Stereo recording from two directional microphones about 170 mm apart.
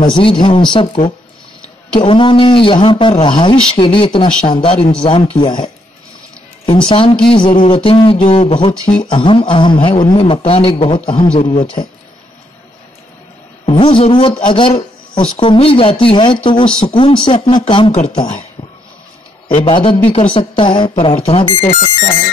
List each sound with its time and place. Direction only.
0.0 s a man's voice: 30° left (ahead or behind)
13.7 s a man's voice: 30° left (ahead or behind)
19.6 s speech: 30° left (ahead or behind)